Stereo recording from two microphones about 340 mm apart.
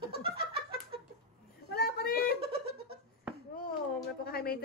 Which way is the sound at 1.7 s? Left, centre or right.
Left.